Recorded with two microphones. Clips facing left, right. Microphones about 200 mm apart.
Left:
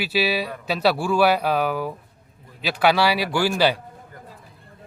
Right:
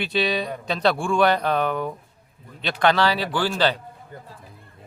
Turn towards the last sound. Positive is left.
turn(degrees=10)  # may be behind; listen again after turning